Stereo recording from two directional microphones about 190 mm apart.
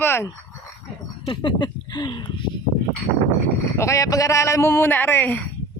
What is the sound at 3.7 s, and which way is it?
Speech, 15° left (ahead or behind).